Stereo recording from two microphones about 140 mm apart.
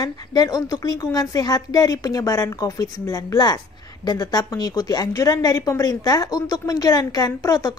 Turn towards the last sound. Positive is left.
turn(degrees=25)  # may be behind; listen again after turning